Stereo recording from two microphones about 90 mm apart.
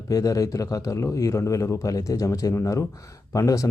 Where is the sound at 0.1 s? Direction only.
40° left (ahead or behind).